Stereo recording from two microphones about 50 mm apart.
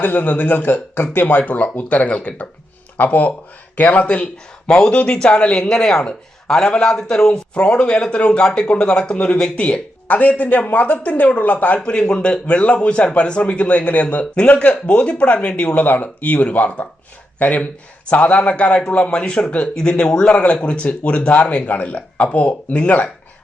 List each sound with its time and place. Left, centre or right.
0.0 s a man's voice: left
5.6 s a man's voice: centre; by 11.8 s left
11.8 s a man's voice: centre
15.9 s a man's voice: left
21.7 s a man's voice: left